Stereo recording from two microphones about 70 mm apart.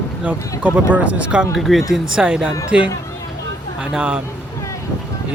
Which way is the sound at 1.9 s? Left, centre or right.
Centre.